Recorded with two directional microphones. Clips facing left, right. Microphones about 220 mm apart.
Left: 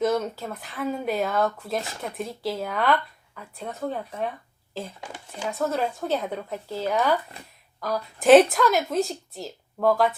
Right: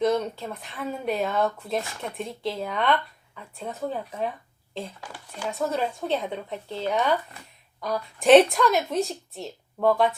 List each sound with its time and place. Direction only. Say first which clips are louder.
0.0 s speech: even; 5° left (ahead or behind)
4.9 s speech: left 1 dB; 20° left (ahead or behind)
5.5 s speech: left 1 dB; centre (ahead or behind)